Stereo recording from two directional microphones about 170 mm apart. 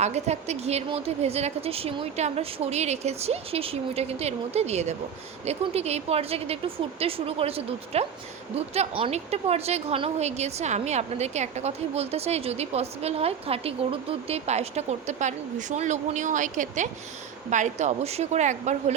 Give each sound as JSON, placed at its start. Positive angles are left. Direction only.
{"t": 0.0, "sound": "a woman's voice", "side_deg": -40}